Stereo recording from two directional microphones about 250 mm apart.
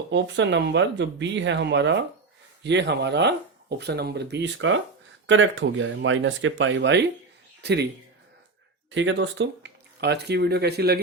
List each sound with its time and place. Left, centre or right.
0.1 s speech: right
9.0 s speech: right